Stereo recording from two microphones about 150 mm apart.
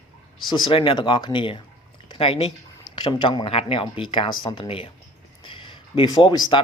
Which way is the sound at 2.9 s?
30° left (ahead or behind).